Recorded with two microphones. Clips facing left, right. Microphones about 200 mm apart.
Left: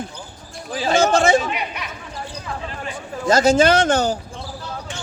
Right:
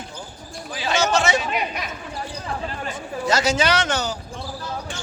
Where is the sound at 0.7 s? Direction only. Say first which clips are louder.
Left 4 dB; 40° left (ahead or behind).